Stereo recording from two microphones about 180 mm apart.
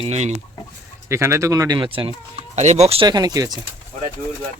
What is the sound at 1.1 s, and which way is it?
Speech, 15° right (ahead or behind).